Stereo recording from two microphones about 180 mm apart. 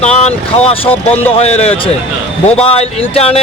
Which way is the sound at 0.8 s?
10° left (ahead or behind).